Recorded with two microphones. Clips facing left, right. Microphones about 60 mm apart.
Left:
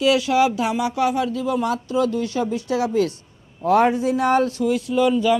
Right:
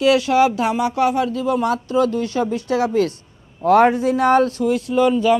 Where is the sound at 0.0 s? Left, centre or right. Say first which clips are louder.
Right 3 dB; right.